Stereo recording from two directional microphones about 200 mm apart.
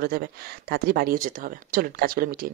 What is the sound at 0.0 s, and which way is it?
Speech, 45° right (ahead or behind).